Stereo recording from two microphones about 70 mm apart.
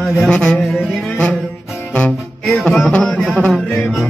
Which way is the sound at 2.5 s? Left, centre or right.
Centre.